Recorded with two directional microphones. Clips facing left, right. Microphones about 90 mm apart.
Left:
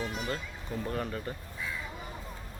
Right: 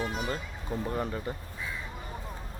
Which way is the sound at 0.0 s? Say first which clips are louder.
Right 3 dB; 35° right (ahead or behind).